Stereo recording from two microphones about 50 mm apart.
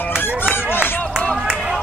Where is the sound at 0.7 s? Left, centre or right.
Left.